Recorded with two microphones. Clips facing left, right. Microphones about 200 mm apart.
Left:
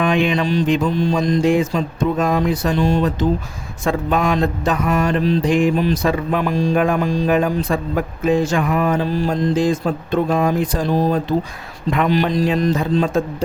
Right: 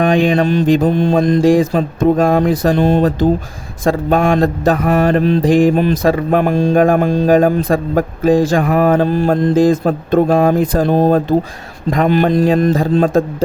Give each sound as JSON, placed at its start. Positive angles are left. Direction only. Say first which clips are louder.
{"t": 0.0, "sound": "mantra", "louder": "right 5 dB", "side_deg": -35}
{"t": 0.3, "sound": "speech", "louder": "right 5 dB", "side_deg": -50}
{"t": 2.7, "sound": "mantra", "louder": "right 4 dB", "side_deg": -55}
{"t": 3.8, "sound": "speech", "louder": "right 5 dB", "side_deg": -40}
{"t": 4.8, "sound": "mantra", "louder": "right 4 dB", "side_deg": -55}
{"t": 5.4, "sound": "speech", "louder": "right 6 dB", "side_deg": -40}
{"t": 5.7, "sound": "speech", "louder": "right 4 dB", "side_deg": -50}
{"t": 8.6, "sound": "speech", "louder": "right 6 dB", "side_deg": -55}
{"t": 11.9, "sound": "speech", "louder": "right 5 dB", "side_deg": -45}